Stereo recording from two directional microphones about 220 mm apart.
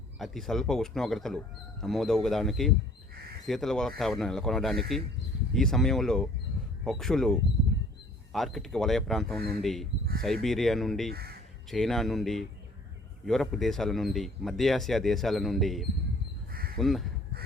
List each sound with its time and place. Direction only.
0.2 s speech: centre (ahead or behind)
11.1 s speech: 45° right (ahead or behind)
11.7 s speech: centre (ahead or behind)
16.5 s crow: 45° right (ahead or behind)
16.7 s speech: centre (ahead or behind)